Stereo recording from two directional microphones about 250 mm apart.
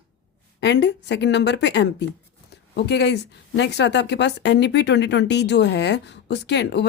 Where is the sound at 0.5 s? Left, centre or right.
Left.